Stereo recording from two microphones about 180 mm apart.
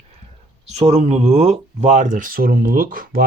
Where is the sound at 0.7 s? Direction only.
35° right (ahead or behind).